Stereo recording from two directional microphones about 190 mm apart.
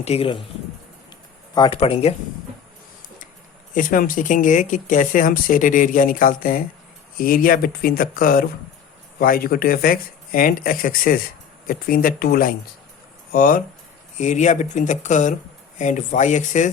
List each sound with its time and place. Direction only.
0.0 s speech: 30° left (ahead or behind)
1.5 s speech: 25° left (ahead or behind)
3.8 s speech: 45° left (ahead or behind)